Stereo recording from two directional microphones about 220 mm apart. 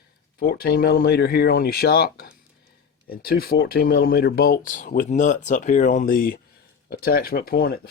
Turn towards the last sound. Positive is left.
turn(degrees=45)  # may be behind; listen again after turning